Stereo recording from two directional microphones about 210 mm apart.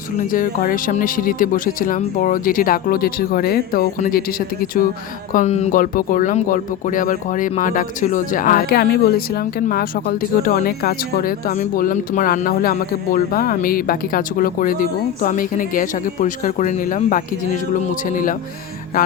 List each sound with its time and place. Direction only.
0.2 s speech: 40° left (ahead or behind)